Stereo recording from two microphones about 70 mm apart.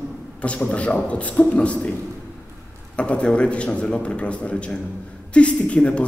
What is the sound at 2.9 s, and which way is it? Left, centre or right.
Speech, centre.